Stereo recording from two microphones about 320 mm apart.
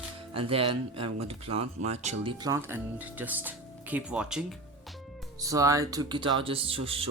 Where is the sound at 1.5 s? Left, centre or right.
Right.